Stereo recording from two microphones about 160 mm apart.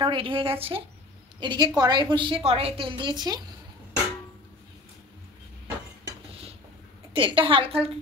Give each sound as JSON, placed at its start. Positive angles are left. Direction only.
{"t": 0.0, "sound": "a woman's voice", "side_deg": -35}
{"t": 7.2, "sound": "a woman's voice", "side_deg": -30}